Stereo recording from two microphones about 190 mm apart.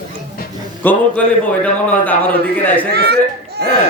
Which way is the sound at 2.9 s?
60° right (ahead or behind).